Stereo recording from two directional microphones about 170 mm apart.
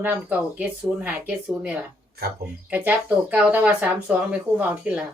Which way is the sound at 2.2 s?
70° right (ahead or behind).